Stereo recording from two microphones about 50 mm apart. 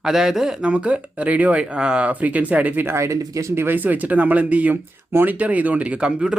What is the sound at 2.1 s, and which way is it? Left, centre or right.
Speech, right.